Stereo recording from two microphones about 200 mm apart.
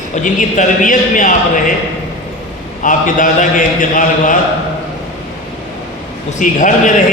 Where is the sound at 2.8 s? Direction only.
40° left (ahead or behind).